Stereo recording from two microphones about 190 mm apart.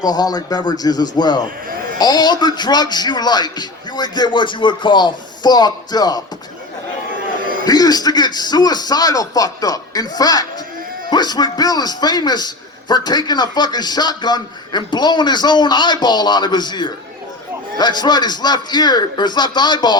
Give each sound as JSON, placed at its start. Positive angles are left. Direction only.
{"t": 0.0, "sound": "a man's voice", "side_deg": 20}
{"t": 7.6, "sound": "a man's voice", "side_deg": 20}